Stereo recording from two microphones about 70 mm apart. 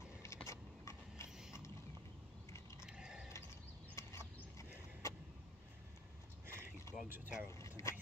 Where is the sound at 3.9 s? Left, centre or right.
Left.